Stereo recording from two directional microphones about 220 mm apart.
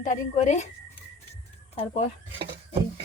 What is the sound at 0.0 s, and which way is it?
Speech, 35° left (ahead or behind).